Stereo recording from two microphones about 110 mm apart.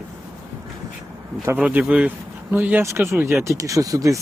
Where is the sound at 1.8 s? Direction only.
5° right (ahead or behind).